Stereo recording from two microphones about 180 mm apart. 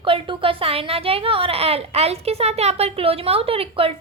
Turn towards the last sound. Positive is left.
turn(degrees=-30)  # may be behind; listen again after turning